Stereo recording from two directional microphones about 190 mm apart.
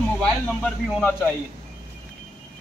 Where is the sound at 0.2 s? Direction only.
5° left (ahead or behind).